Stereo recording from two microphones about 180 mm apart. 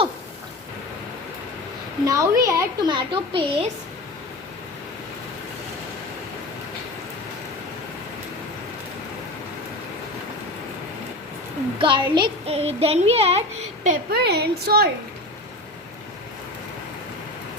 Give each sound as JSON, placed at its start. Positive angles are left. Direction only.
{"t": 2.0, "sound": "a woman's voice", "side_deg": -20}
{"t": 11.8, "sound": "speech", "side_deg": -25}
{"t": 13.8, "sound": "a woman's voice", "side_deg": -55}